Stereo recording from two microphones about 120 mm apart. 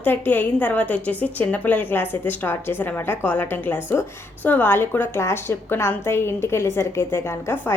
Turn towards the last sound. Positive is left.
turn(degrees=20)  # may be behind; listen again after turning